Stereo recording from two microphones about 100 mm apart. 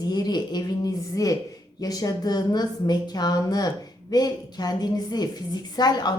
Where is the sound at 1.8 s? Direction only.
40° left (ahead or behind).